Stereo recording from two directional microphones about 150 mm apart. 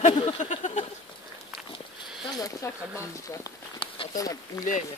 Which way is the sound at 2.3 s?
25° left (ahead or behind).